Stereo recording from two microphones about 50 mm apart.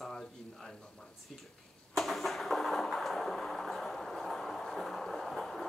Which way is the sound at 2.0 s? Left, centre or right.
Centre.